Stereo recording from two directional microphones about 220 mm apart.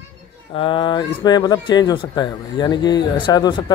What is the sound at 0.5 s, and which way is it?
A man's voice, 20° left (ahead or behind).